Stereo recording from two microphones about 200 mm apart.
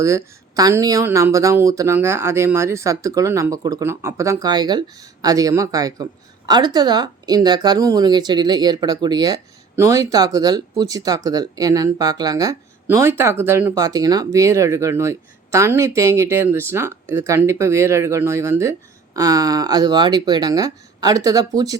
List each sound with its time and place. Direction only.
0.5 s speech: 20° right (ahead or behind)